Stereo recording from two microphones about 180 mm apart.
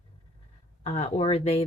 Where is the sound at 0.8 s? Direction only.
40° left (ahead or behind).